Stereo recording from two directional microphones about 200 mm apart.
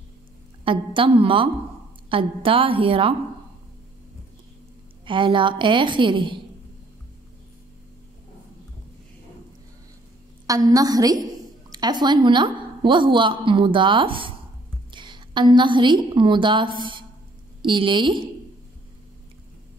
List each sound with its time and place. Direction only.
0.7 s a woman's voice: 25° right (ahead or behind)
5.0 s a woman's voice: 25° right (ahead or behind)
10.4 s a woman's voice: 15° right (ahead or behind)